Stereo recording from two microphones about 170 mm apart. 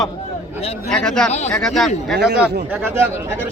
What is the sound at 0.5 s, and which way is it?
Speech, 40° left (ahead or behind).